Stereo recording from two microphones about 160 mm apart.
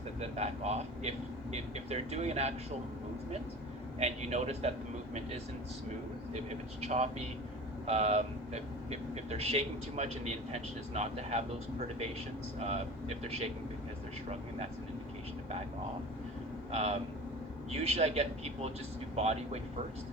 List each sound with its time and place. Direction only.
0.2 s a man's voice: 40° right (ahead or behind)
4.0 s speech: 45° right (ahead or behind)
6.8 s speech: 45° right (ahead or behind)
12.5 s a man's voice: 45° right (ahead or behind)
16.7 s a man's voice: 40° right (ahead or behind)